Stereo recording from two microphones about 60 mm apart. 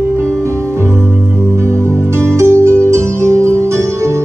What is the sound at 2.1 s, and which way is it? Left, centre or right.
Music, right.